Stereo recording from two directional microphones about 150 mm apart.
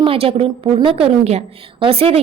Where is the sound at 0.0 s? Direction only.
40° right (ahead or behind).